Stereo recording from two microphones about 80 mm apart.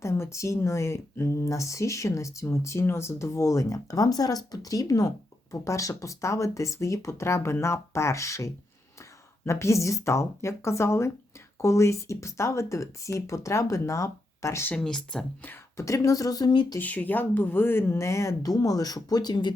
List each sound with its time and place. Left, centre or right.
0.0 s speech: left
14.8 s speech: centre
15.8 s speech: left
16.8 s speech: left